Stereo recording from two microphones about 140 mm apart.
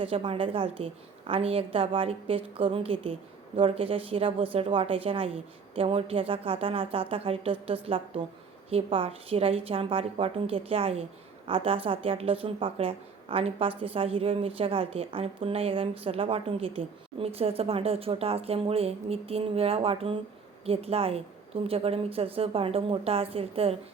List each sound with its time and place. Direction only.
0.0 s a woman's voice: 40° right (ahead or behind)